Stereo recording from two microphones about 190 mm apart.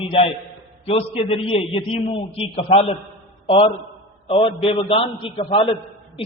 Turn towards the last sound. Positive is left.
turn(degrees=30)  # may be behind; listen again after turning